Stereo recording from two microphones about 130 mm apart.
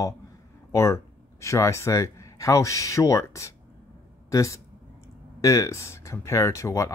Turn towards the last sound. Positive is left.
turn(degrees=25)  # may be behind; listen again after turning